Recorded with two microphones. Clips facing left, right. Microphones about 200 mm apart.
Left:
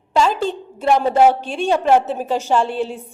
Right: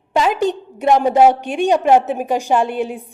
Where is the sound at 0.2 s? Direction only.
15° right (ahead or behind).